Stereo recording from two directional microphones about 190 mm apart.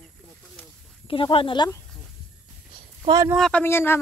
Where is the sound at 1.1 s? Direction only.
25° left (ahead or behind).